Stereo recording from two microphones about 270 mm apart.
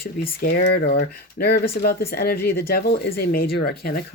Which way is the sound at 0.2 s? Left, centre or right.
Left.